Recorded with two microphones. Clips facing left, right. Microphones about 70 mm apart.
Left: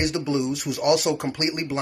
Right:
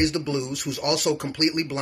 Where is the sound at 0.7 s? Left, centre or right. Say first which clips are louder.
Left 2 dB; left.